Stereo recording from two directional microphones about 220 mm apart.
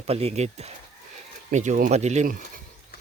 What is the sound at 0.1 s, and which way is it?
Speech, 25° right (ahead or behind).